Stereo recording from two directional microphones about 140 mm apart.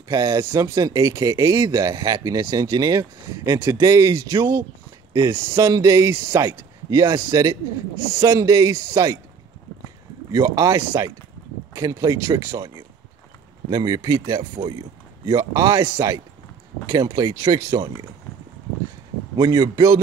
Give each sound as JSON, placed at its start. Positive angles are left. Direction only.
{"t": 0.1, "sound": "speech", "side_deg": -30}
{"t": 10.3, "sound": "speech", "side_deg": -25}
{"t": 19.3, "sound": "speech", "side_deg": -30}